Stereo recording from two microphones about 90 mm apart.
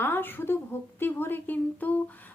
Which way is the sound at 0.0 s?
25° left (ahead or behind).